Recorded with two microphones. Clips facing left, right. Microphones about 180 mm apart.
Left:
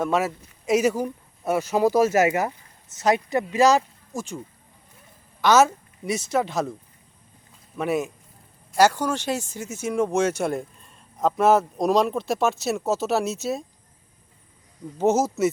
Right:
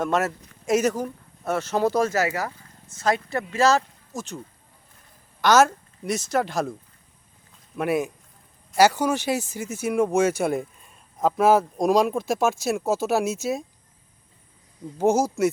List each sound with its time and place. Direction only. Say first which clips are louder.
0.0 s speech: even; 5° left (ahead or behind)
2.2 s speech: left 5 dB; 20° left (ahead or behind)
5.4 s a woman's voice: even; 5° left (ahead or behind)
7.8 s speech: right 1 dB; 5° right (ahead or behind)
12.4 s speech: even; 10° right (ahead or behind)
14.9 s speech: even; 10° right (ahead or behind)